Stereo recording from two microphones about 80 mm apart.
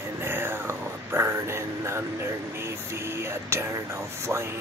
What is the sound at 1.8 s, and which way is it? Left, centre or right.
Speech, right.